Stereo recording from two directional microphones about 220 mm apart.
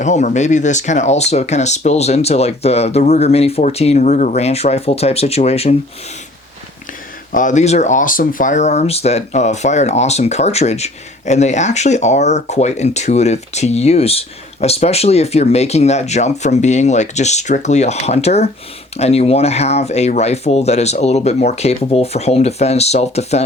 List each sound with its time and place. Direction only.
0.0 s speech: 35° left (ahead or behind)
7.3 s speech: 35° left (ahead or behind)